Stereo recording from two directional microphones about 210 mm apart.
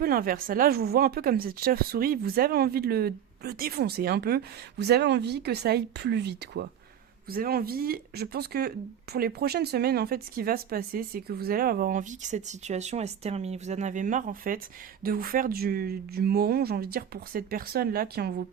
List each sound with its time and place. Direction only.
0.0 s speech: 45° right (ahead or behind)